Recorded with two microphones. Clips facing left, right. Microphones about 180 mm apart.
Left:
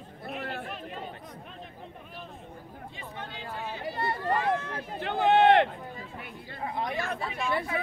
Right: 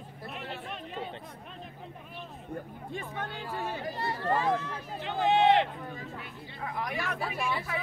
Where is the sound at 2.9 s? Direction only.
50° right (ahead or behind).